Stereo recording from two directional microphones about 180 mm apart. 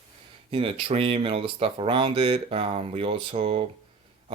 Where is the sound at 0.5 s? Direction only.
30° right (ahead or behind).